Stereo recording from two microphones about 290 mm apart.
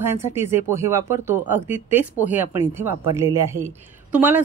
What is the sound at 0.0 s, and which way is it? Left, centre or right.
A woman's voice, centre.